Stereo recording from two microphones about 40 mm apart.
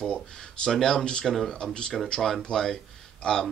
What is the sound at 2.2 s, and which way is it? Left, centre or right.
Speech, centre.